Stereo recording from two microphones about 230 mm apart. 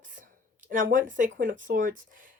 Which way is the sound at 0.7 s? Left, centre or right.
Right.